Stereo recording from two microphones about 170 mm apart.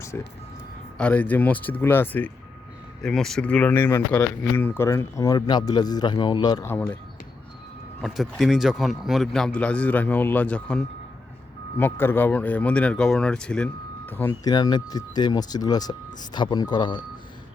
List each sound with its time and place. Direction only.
0.1 s speech: 10° left (ahead or behind)
8.0 s speech: centre (ahead or behind)
14.4 s speech: 25° left (ahead or behind)